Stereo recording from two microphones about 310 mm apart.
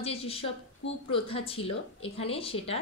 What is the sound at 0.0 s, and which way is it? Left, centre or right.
Speech, centre.